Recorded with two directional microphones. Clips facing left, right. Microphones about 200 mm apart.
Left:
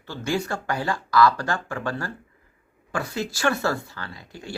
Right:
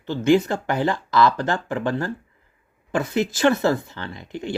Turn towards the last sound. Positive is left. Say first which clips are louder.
# right 8 dB
turn(degrees=-20)  # may be behind; listen again after turning